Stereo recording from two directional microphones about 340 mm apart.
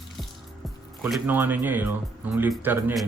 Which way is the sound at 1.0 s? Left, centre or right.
Centre.